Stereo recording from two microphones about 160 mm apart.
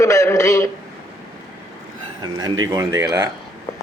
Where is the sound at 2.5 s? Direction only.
25° right (ahead or behind).